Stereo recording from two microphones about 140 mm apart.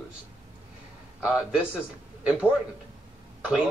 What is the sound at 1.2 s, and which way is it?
Speech, 5° right (ahead or behind).